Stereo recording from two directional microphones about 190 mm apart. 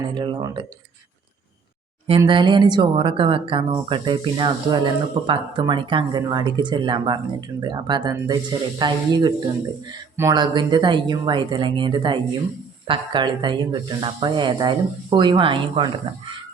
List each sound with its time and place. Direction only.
0.1 s speech: 25° right (ahead or behind)
2.0 s speech: 25° right (ahead or behind)